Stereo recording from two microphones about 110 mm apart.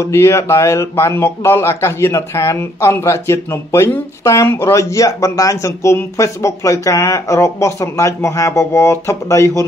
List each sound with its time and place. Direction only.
0.0 s speech: 25° left (ahead or behind)